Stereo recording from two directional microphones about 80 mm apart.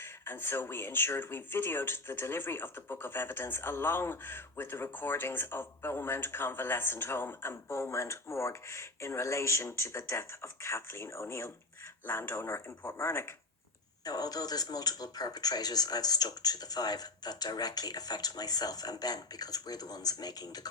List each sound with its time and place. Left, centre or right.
0.0 s speech: left
14.0 s speech: left